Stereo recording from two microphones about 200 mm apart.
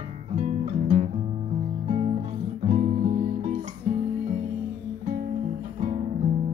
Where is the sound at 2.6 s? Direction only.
40° right (ahead or behind).